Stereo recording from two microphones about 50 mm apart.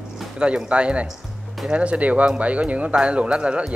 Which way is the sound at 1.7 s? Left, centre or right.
Right.